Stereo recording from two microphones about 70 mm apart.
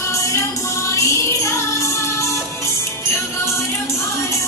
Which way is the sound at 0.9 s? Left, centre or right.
Left.